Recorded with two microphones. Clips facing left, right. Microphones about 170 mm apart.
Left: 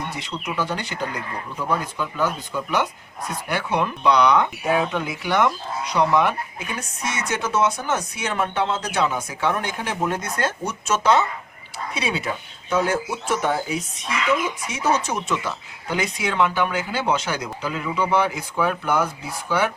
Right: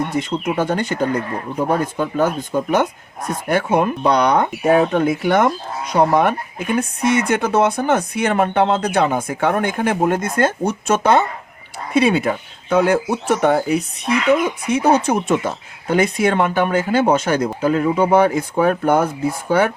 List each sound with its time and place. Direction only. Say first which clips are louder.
0.1 s speech: right 10 dB; 50° right (ahead or behind)